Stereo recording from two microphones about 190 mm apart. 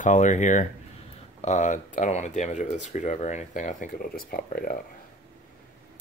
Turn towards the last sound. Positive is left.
turn(degrees=50)  # may be behind; listen again after turning